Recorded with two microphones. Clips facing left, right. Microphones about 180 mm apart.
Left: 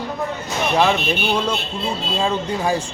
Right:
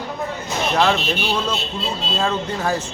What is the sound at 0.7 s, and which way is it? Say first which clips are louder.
A man's voice: left 1 dB; 10° left (ahead or behind).